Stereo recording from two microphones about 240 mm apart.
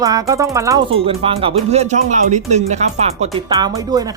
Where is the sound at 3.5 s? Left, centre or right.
Centre.